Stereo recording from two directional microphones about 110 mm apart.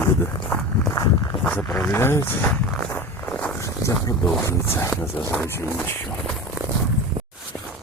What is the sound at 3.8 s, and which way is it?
Speech, 25° left (ahead or behind).